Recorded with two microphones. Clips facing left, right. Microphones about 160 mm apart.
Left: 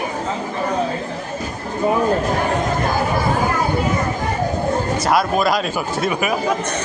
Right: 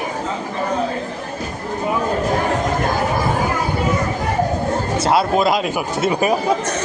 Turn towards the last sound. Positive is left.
turn(degrees=-30)  # may be behind; listen again after turning